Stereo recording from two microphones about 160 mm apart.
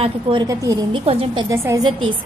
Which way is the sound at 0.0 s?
30° right (ahead or behind).